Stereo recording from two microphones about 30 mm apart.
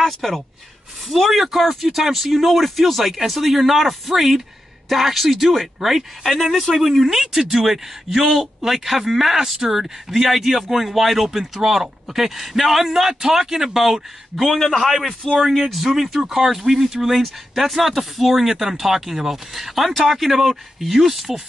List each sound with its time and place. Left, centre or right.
0.0 s speech: centre
1.3 s speech: centre
7.1 s speech: centre